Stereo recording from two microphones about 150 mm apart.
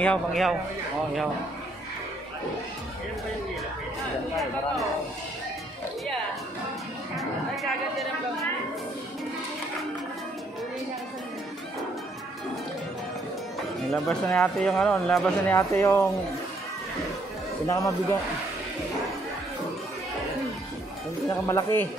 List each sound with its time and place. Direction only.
0.0 s speech: 5° left (ahead or behind)
14.0 s speech: 5° left (ahead or behind)
15.5 s speech: 15° left (ahead or behind)
17.6 s speech: 20° left (ahead or behind)
21.3 s speech: 20° left (ahead or behind)